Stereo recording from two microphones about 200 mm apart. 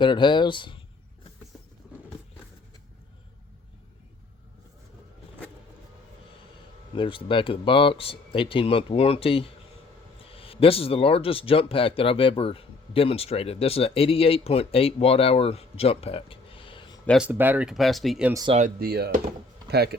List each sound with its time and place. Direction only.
0.0 s speech: 25° left (ahead or behind)
6.9 s speech: 25° left (ahead or behind)
17.1 s speech: 5° right (ahead or behind)
18.5 s speech: 45° right (ahead or behind)